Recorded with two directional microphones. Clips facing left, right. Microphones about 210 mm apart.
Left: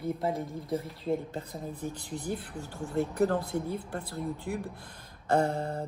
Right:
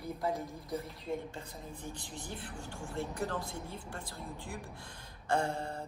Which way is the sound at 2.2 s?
40° left (ahead or behind).